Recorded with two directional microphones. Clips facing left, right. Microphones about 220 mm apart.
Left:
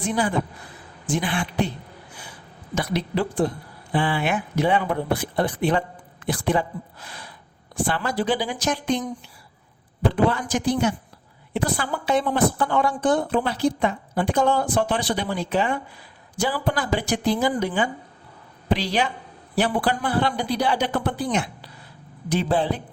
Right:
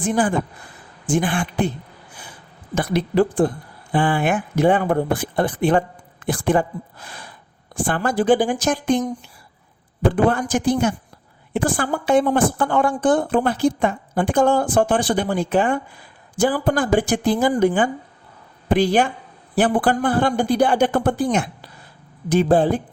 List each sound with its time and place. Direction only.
0.0 s speech: 50° right (ahead or behind)
2.7 s speech: 50° right (ahead or behind)